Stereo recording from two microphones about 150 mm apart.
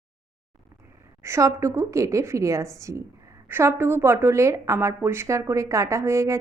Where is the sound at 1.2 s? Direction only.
20° right (ahead or behind).